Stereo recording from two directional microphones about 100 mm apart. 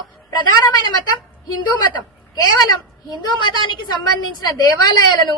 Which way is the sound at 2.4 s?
45° left (ahead or behind).